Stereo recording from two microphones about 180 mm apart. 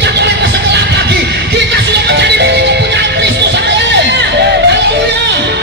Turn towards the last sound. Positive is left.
turn(degrees=-70)  # may be behind; listen again after turning